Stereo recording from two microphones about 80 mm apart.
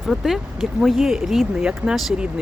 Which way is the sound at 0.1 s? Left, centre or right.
Centre.